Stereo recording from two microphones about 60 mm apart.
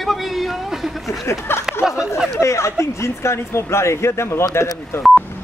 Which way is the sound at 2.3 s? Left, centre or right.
Left.